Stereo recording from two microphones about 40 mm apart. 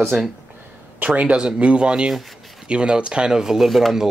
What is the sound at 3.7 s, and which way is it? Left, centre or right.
Speech, centre.